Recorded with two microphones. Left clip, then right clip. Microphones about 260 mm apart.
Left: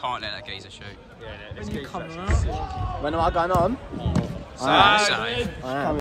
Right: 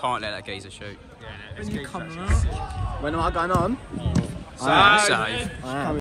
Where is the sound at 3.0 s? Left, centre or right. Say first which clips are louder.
Left 2 dB; left.